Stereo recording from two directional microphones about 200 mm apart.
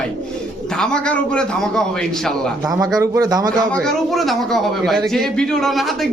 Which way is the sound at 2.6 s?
20° right (ahead or behind).